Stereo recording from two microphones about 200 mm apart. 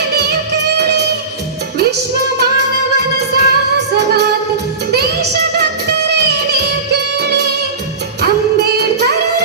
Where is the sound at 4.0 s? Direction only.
55° right (ahead or behind).